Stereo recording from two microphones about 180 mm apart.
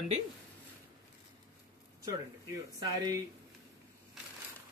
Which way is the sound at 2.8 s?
20° right (ahead or behind).